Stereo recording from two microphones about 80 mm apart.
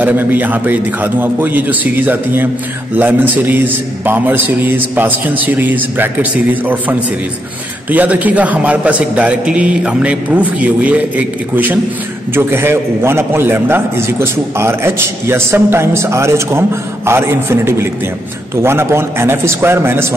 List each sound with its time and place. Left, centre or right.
0.0 s a man's voice: right